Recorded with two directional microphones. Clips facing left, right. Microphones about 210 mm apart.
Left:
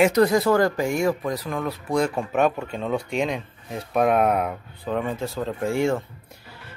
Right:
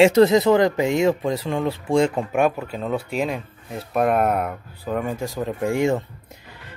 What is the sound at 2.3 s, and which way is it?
Speech, 5° right (ahead or behind).